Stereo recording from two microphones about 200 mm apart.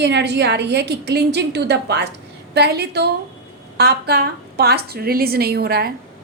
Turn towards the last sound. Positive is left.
turn(degrees=-50)  # may be behind; listen again after turning